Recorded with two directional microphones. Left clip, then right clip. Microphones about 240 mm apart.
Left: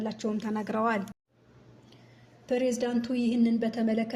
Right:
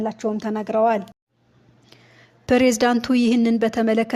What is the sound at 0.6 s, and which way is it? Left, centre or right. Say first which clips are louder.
Speech: right 11 dB; centre.